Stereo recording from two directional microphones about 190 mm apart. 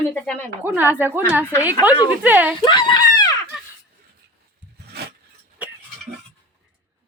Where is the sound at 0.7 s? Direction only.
10° right (ahead or behind).